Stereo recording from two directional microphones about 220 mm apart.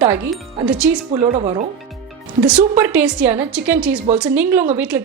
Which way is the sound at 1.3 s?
30° right (ahead or behind).